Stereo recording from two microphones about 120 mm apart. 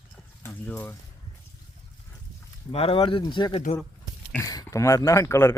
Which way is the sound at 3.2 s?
40° left (ahead or behind).